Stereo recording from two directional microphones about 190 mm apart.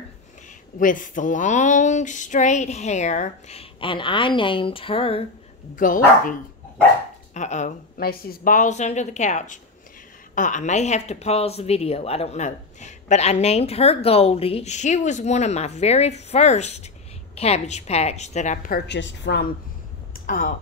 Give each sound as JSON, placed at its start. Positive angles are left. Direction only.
{"t": 0.7, "sound": "a woman's voice", "side_deg": 45}
{"t": 5.8, "sound": "speech", "side_deg": 45}
{"t": 7.3, "sound": "a woman's voice", "side_deg": 40}
{"t": 18.9, "sound": "a woman's voice", "side_deg": 65}
{"t": 20.2, "sound": "speech", "side_deg": 45}